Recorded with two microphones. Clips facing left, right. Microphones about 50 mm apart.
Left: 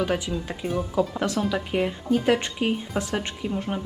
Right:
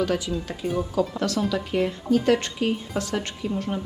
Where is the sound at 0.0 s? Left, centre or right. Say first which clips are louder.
Right 1 dB; left.